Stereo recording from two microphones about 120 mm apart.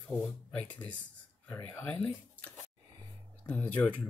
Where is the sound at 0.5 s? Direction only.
10° left (ahead or behind).